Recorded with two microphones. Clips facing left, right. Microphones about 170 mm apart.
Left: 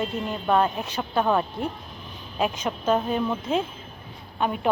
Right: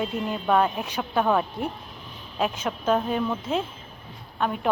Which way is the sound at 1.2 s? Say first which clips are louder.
Even; centre (ahead or behind).